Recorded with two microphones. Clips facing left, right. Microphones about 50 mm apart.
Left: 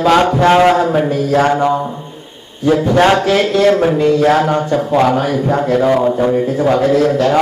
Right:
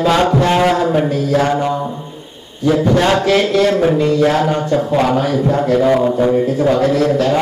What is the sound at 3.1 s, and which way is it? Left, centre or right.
A man's voice, centre.